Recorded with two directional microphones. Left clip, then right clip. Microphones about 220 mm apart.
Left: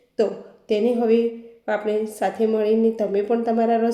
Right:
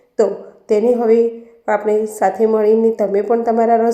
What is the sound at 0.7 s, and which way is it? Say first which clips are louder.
A woman's voice: right 6 dB; 20° right (ahead or behind).